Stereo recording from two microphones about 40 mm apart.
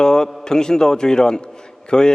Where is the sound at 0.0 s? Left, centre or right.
Centre.